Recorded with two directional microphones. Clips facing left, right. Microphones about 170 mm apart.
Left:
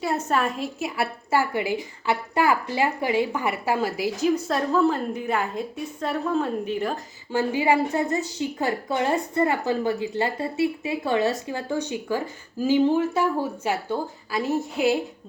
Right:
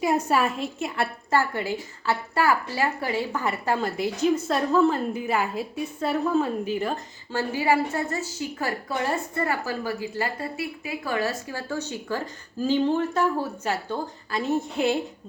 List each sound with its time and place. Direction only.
0.0 s a woman's voice: 15° right (ahead or behind)
7.3 s a woman's voice: 15° left (ahead or behind)